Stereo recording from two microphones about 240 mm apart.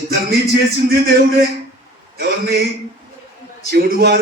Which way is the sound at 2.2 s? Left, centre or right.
Right.